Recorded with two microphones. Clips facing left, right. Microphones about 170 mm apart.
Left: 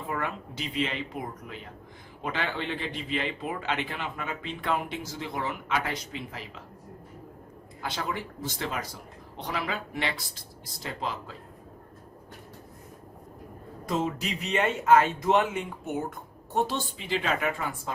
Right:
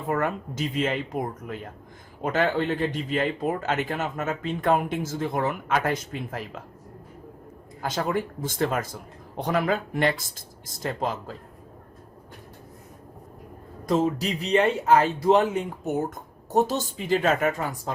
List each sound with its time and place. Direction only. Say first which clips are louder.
0.1 s speech: right 8 dB; 45° right (ahead or behind)
7.8 s speech: right 7 dB; 45° right (ahead or behind)
13.8 s speech: right 6 dB; 40° right (ahead or behind)